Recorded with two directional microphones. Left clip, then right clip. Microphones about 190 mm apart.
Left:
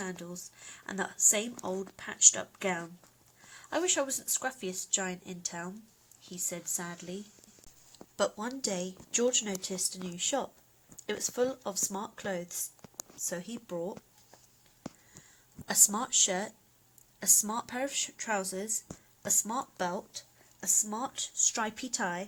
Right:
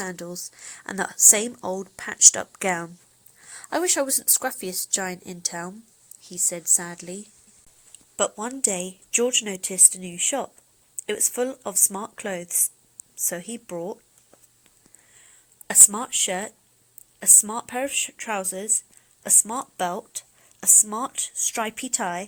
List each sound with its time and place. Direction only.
0.0 s speech: 40° right (ahead or behind)
7.9 s speech: 20° right (ahead or behind)
15.6 s speech: 10° right (ahead or behind)